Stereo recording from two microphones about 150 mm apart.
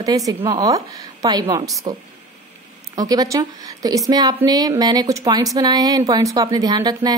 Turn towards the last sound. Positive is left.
turn(degrees=-25)  # may be behind; listen again after turning